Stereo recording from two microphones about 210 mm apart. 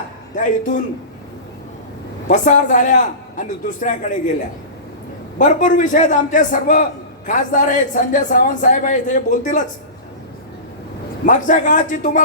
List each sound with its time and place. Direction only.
0.3 s a man's voice: 35° left (ahead or behind)
2.2 s a man's voice: 35° left (ahead or behind)
5.4 s a man's voice: 35° left (ahead or behind)
11.3 s a man's voice: 35° left (ahead or behind)